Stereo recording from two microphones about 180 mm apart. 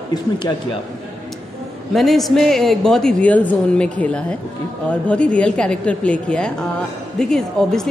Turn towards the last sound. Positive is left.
turn(degrees=0)  # may be behind; listen again after turning